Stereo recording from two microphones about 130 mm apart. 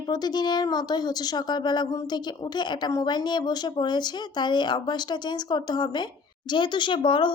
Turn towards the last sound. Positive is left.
turn(degrees=40)  # may be behind; listen again after turning